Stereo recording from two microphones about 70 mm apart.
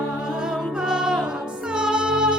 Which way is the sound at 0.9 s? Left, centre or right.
Centre.